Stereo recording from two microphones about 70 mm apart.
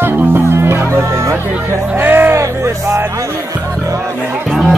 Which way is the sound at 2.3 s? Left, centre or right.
Right.